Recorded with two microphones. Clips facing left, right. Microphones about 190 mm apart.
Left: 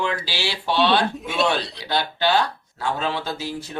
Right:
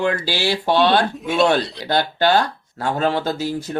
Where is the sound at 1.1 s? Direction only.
Centre (ahead or behind).